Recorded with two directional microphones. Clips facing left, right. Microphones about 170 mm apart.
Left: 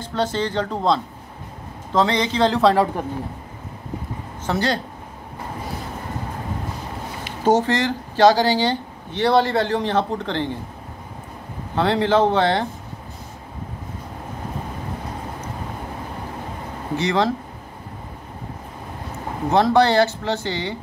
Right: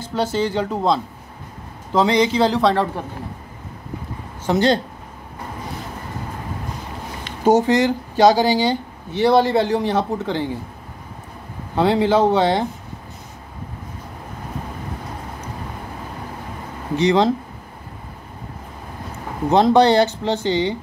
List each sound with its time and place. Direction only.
0.0 s speech: 10° right (ahead or behind)
4.5 s speech: 20° right (ahead or behind)
7.4 s speech: 10° right (ahead or behind)
11.7 s speech: 10° right (ahead or behind)
16.9 s speech: 15° right (ahead or behind)
19.5 s speech: 20° right (ahead or behind)